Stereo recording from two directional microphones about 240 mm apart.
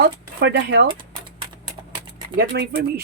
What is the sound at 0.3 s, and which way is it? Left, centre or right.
Speech, right.